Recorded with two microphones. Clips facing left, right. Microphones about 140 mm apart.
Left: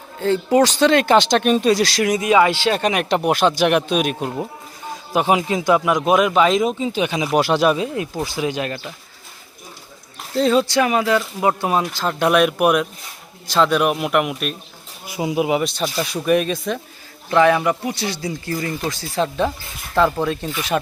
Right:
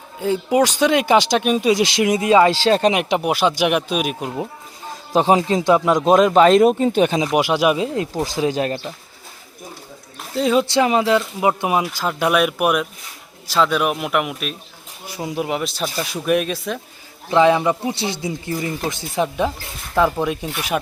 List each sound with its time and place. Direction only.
0.2 s speech: 10° right (ahead or behind)
1.7 s speech: 20° right (ahead or behind)
3.2 s speech: 5° right (ahead or behind)
5.1 s speech: 30° right (ahead or behind)
6.7 s speech: 50° right (ahead or behind)
7.3 s speech: 10° right (ahead or behind)
8.4 s speech: 35° right (ahead or behind)
10.3 s speech: 10° right (ahead or behind)
10.6 s speech: 25° right (ahead or behind); by 16.8 s centre (ahead or behind)
17.2 s speech: 20° right (ahead or behind)